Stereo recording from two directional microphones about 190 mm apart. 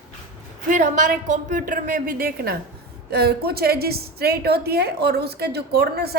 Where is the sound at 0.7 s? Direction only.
40° right (ahead or behind).